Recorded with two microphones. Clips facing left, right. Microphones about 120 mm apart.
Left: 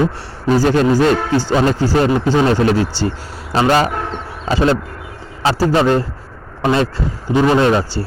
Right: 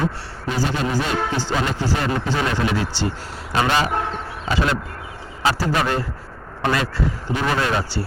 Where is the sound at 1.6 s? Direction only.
40° left (ahead or behind).